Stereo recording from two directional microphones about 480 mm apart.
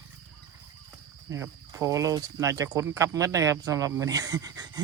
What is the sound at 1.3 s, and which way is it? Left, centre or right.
Speech, centre.